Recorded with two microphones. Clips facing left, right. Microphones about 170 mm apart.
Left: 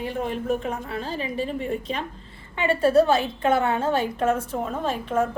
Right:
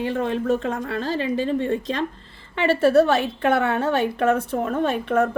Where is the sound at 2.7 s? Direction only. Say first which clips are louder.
Right 2 dB; 75° right (ahead or behind).